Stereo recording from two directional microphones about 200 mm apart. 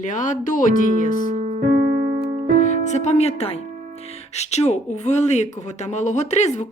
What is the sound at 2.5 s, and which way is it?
Speech, 35° left (ahead or behind).